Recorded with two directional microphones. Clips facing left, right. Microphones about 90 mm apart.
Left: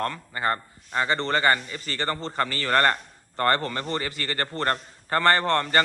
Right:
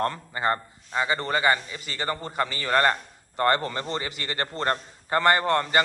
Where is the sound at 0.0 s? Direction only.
20° right (ahead or behind).